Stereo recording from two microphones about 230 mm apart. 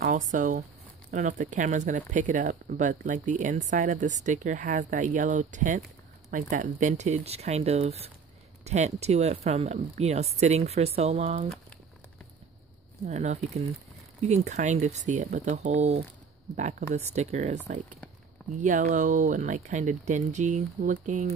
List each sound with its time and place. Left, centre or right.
0.0 s speech: right
13.0 s speech: right
18.6 s speech: right